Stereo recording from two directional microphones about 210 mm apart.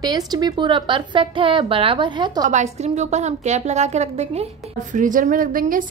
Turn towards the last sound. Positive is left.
turn(degrees=-40)  # may be behind; listen again after turning